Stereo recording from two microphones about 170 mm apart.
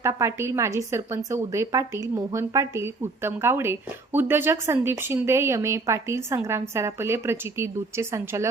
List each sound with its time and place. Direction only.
0.0 s a woman's voice: 15° right (ahead or behind)